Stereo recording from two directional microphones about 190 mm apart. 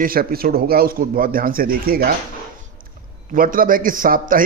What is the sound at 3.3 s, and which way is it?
A man's voice, 45° right (ahead or behind).